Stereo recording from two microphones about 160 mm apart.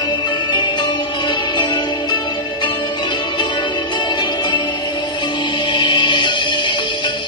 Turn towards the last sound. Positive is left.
turn(degrees=30)  # may be behind; listen again after turning